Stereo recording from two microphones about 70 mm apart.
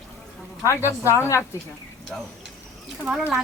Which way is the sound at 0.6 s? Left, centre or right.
Left.